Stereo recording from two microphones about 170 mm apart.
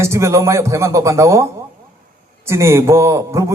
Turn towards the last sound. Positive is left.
turn(degrees=-15)  # may be behind; listen again after turning